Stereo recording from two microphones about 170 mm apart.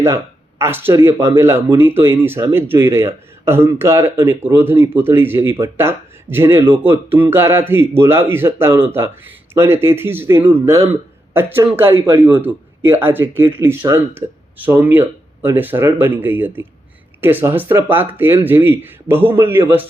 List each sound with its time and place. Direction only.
0.6 s speech: 15° right (ahead or behind)